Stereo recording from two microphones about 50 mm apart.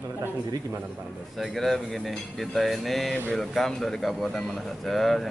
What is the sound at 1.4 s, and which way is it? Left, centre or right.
A man's voice, centre.